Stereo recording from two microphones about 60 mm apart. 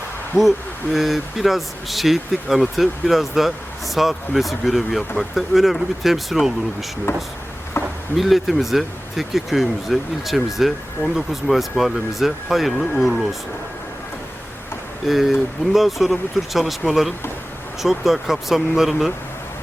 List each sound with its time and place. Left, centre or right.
0.3 s speech: centre
7.1 s speech: left
8.1 s speech: centre
15.0 s speech: centre